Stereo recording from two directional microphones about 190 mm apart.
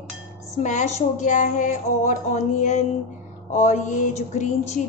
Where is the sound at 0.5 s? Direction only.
40° left (ahead or behind).